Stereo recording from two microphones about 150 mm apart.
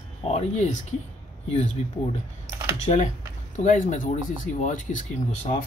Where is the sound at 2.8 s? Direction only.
50° left (ahead or behind).